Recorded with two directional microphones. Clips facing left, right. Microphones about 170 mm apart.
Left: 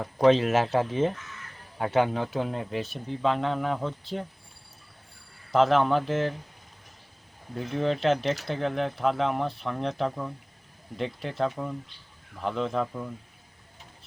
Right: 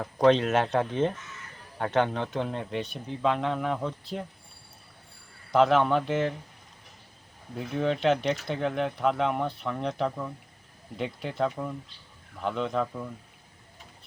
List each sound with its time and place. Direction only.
0.0 s speech: 5° left (ahead or behind)
5.5 s speech: centre (ahead or behind)
7.5 s speech: centre (ahead or behind)